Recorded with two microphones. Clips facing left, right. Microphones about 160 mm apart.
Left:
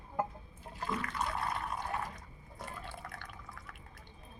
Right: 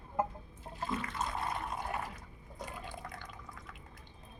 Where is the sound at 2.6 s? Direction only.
15° right (ahead or behind).